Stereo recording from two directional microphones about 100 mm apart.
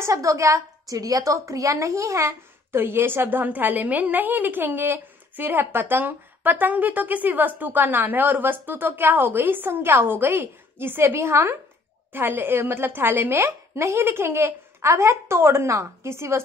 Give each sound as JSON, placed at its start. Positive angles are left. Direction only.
{"t": 0.0, "sound": "a woman's voice", "side_deg": -30}